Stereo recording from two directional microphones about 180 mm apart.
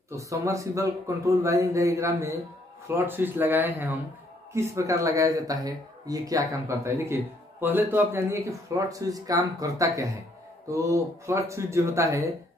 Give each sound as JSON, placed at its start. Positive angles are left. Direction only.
{"t": 0.1, "sound": "speech", "side_deg": -15}